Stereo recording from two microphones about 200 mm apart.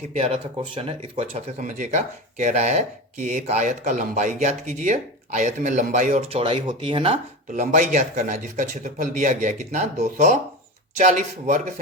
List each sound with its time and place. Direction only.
0.1 s speech: 30° right (ahead or behind)